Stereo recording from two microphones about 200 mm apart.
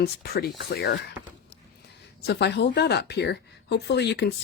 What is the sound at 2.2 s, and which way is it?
Speech, 55° left (ahead or behind).